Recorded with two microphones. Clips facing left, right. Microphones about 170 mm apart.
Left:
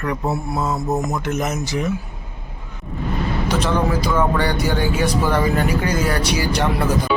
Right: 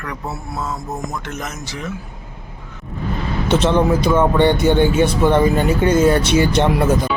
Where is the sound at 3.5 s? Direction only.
25° right (ahead or behind).